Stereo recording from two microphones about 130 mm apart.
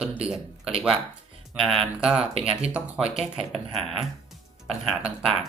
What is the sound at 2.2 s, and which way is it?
Speech, 50° right (ahead or behind).